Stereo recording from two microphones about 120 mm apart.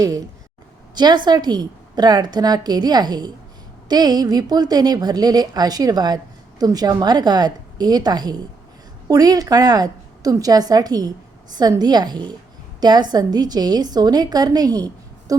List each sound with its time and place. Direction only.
0.9 s a woman's voice: 35° right (ahead or behind)
15.3 s music: 30° right (ahead or behind)